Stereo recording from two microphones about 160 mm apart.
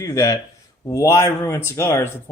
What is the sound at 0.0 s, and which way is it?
Speech, 20° left (ahead or behind).